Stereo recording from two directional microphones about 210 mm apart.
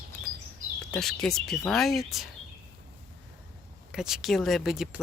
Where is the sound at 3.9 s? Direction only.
Centre (ahead or behind).